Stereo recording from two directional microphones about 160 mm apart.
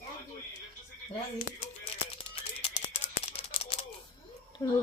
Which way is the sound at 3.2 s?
40° left (ahead or behind).